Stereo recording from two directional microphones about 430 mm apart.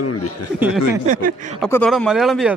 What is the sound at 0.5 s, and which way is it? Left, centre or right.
Speech, centre.